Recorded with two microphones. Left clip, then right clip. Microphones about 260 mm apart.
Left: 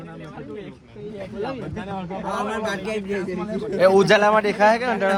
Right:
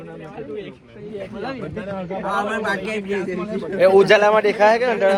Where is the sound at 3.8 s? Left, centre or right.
Left.